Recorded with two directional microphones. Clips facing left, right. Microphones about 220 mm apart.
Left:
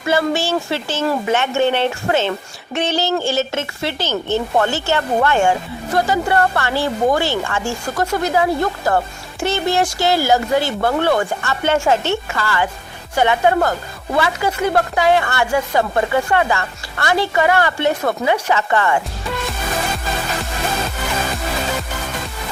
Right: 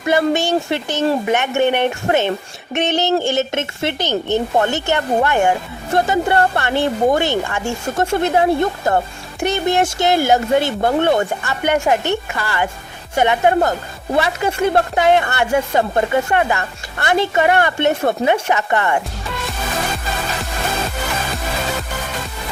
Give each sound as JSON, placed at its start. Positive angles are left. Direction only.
{"t": 0.1, "sound": "speech", "side_deg": -20}